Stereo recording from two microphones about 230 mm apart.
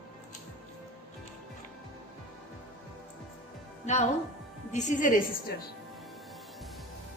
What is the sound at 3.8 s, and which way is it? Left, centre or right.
A woman's voice, left.